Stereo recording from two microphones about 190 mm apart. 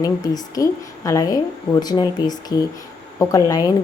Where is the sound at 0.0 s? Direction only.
20° left (ahead or behind).